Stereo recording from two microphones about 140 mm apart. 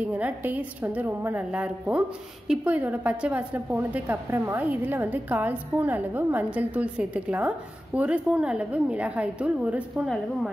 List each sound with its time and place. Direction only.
0.0 s a woman's voice: 10° right (ahead or behind)